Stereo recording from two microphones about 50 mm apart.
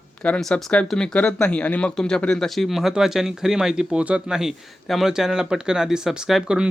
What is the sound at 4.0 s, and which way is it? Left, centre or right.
Speech, right.